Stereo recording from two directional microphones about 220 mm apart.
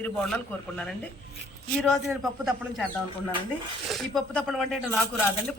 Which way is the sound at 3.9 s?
Centre (ahead or behind).